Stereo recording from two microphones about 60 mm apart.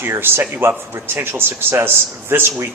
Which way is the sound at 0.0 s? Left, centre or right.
Right.